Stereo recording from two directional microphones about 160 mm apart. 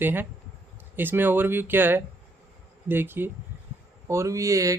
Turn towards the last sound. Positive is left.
turn(degrees=-20)  # may be behind; listen again after turning